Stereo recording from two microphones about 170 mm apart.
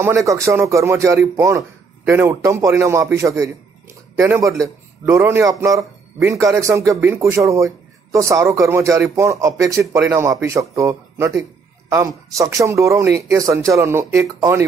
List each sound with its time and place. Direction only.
0.0 s a man's voice: 15° right (ahead or behind)